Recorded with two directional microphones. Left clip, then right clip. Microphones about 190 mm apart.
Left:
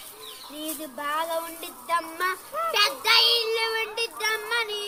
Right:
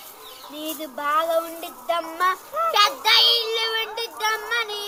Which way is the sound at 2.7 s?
15° left (ahead or behind).